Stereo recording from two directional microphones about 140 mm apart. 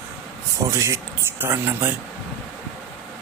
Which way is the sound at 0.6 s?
20° right (ahead or behind).